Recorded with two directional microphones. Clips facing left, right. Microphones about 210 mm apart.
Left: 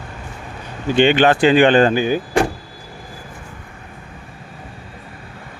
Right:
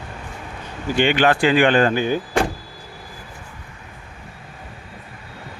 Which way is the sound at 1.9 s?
10° left (ahead or behind).